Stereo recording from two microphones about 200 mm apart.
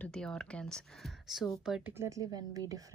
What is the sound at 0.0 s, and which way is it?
Speech, 5° left (ahead or behind).